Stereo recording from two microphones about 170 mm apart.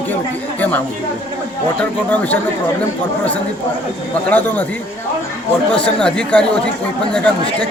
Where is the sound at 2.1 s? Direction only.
10° left (ahead or behind).